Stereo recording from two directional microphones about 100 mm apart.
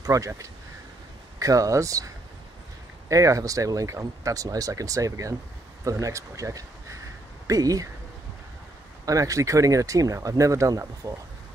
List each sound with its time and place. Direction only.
0.0 s speech: 35° right (ahead or behind)
3.1 s speech: 35° right (ahead or behind)
9.0 s speech: 35° right (ahead or behind)